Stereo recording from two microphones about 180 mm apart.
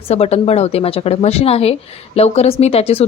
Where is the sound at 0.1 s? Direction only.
35° left (ahead or behind).